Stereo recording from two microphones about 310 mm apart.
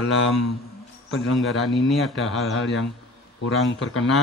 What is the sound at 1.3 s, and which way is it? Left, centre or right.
Speech, centre.